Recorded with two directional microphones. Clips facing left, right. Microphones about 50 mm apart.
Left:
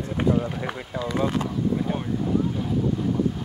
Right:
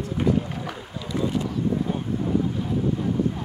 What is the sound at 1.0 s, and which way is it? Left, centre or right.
Speech, left.